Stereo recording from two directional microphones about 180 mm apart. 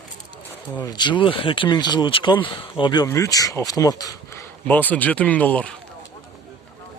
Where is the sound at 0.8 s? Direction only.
25° left (ahead or behind); by 5.7 s 10° left (ahead or behind).